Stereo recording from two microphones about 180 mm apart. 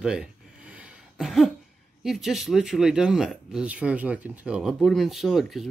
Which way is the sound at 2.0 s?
Centre (ahead or behind).